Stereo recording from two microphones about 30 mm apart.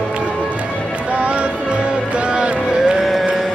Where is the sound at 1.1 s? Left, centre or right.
Right.